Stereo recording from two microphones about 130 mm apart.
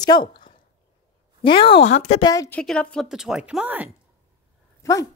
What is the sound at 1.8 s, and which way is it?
Speech, 60° left (ahead or behind).